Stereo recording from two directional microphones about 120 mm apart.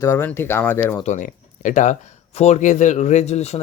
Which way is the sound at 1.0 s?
90° left.